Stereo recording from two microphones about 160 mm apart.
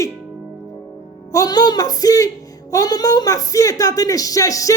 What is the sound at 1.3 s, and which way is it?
Speech, 20° left (ahead or behind).